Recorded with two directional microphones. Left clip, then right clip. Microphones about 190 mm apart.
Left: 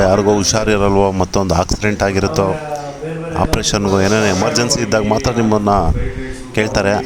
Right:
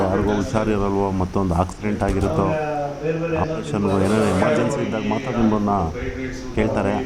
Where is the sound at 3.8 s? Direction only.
85° left.